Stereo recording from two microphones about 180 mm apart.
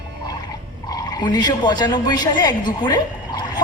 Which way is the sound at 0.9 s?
20° left (ahead or behind).